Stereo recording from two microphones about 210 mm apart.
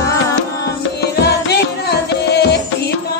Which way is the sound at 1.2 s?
50° left (ahead or behind).